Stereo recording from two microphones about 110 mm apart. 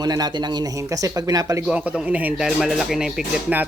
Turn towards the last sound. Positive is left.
turn(degrees=-5)  # may be behind; listen again after turning